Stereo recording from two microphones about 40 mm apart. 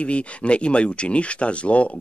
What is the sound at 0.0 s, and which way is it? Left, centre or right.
Speech, left.